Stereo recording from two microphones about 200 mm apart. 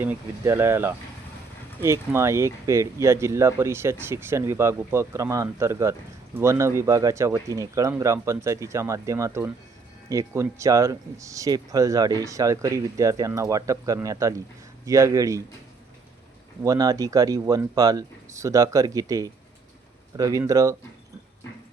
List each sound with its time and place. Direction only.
0.0 s speech: 10° right (ahead or behind)
16.6 s speech: 15° right (ahead or behind)